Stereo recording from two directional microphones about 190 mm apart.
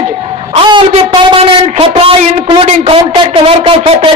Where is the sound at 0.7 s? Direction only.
25° right (ahead or behind).